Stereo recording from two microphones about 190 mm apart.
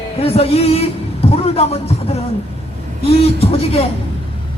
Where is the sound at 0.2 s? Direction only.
30° left (ahead or behind).